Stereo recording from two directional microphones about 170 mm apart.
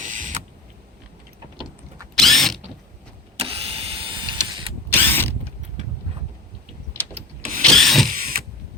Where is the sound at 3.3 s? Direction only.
35° right (ahead or behind).